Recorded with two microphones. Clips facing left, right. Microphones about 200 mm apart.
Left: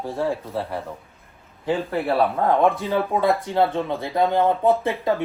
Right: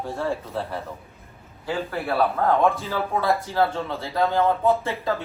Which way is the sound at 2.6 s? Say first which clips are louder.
Left 3 dB; 20° left (ahead or behind).